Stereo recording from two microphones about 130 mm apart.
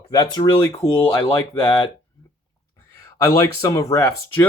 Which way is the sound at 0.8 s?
45° left (ahead or behind).